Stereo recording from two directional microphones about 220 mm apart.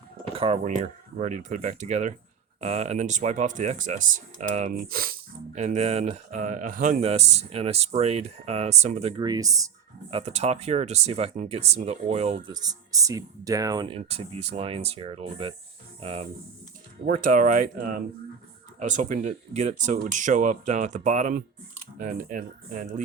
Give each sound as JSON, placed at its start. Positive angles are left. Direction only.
{"t": 0.3, "sound": "speech", "side_deg": -25}
{"t": 10.1, "sound": "speech", "side_deg": -30}
{"t": 17.1, "sound": "speech", "side_deg": -40}